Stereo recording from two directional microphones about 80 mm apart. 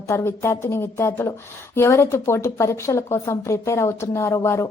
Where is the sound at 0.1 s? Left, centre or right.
Left.